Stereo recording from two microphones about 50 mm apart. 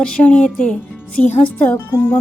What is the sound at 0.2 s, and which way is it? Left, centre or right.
A woman's voice, left.